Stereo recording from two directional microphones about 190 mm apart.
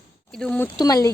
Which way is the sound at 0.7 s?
20° left (ahead or behind).